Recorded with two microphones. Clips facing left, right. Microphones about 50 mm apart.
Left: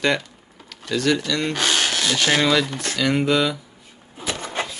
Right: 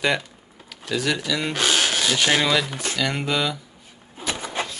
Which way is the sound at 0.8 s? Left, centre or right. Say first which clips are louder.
Left 3 dB; centre.